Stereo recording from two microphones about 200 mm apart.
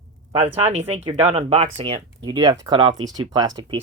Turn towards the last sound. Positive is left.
turn(degrees=-20)  # may be behind; listen again after turning